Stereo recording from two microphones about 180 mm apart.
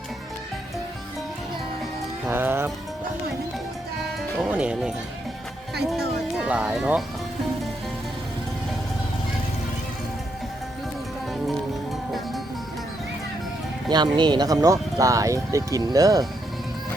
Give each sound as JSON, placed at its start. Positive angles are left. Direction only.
{"t": 2.3, "sound": "speech", "side_deg": -10}
{"t": 4.4, "sound": "speech", "side_deg": -5}
{"t": 6.5, "sound": "speech", "side_deg": -5}
{"t": 11.4, "sound": "music", "side_deg": 0}
{"t": 13.9, "sound": "speech", "side_deg": -25}